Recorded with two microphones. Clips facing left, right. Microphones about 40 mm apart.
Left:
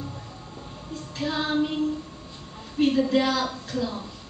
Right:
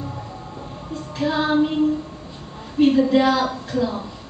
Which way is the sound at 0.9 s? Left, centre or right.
Centre.